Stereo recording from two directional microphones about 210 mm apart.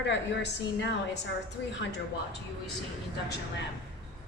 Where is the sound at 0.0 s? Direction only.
55° left (ahead or behind).